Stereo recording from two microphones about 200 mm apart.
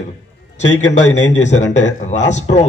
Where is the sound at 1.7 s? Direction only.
35° left (ahead or behind).